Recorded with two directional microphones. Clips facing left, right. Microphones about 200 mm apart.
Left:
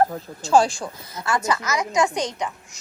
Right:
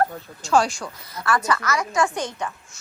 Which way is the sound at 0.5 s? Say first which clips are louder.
Left 2 dB; 30° left (ahead or behind).